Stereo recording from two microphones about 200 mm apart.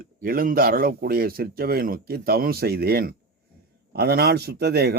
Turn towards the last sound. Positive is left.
turn(degrees=-55)  # may be behind; listen again after turning